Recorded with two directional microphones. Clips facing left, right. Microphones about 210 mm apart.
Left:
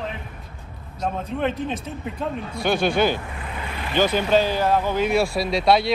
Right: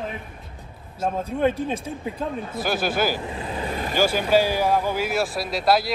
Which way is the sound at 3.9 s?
10° right (ahead or behind).